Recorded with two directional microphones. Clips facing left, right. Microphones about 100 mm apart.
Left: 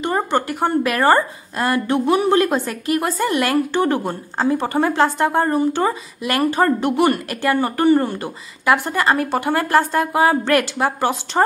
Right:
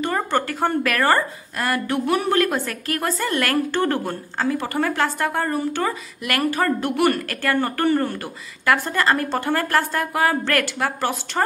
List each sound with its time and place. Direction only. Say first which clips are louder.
0.0 s a woman's voice: left 2 dB; 20° left (ahead or behind)